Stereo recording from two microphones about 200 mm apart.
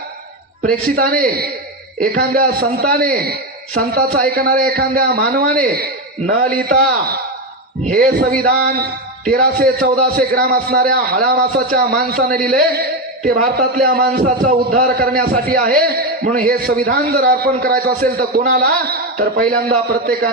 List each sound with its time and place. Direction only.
0.6 s a man's voice: 45° right (ahead or behind)
7.9 s a man's voice: 45° right (ahead or behind)